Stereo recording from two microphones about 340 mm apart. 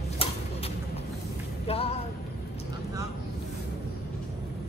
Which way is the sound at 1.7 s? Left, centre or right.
Centre.